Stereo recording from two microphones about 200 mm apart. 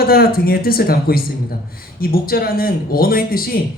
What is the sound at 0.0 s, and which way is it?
A man's voice, 50° left (ahead or behind).